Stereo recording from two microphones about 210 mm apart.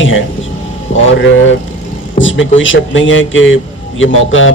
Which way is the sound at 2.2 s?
65° left (ahead or behind).